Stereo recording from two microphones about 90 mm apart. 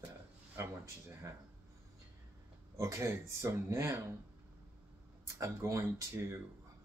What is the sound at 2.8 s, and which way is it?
Speech, 30° right (ahead or behind).